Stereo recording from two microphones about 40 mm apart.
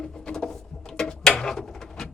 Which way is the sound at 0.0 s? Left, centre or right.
Centre.